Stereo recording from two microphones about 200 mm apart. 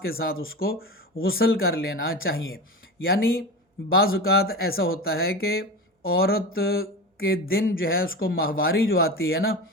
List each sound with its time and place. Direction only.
0.0 s speech: 50° left (ahead or behind)